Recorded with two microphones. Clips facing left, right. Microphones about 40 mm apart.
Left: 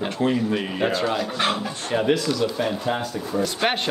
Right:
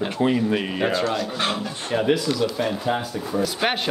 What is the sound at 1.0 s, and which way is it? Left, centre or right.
Speech, centre.